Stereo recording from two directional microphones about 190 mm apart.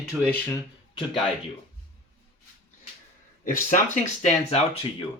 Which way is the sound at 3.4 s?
45° left (ahead or behind).